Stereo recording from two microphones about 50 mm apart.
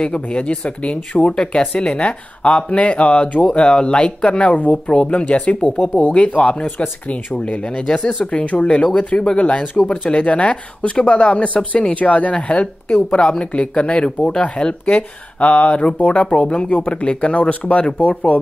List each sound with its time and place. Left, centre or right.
0.0 s speech: left